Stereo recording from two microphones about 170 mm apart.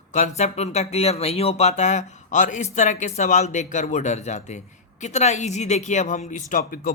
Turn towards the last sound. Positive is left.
turn(degrees=55)  # may be behind; listen again after turning